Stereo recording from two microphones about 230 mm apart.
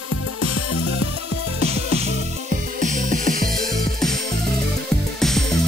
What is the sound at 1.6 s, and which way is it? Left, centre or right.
Music, right.